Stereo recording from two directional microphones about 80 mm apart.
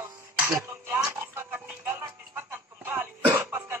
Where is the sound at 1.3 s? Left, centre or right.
Right.